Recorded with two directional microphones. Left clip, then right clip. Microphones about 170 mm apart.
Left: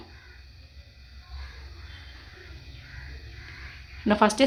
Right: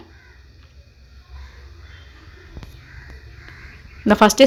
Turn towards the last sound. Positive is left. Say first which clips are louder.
# right 8 dB
turn(degrees=-35)  # may be behind; listen again after turning